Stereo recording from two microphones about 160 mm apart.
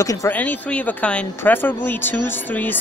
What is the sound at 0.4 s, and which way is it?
Speech, 10° left (ahead or behind).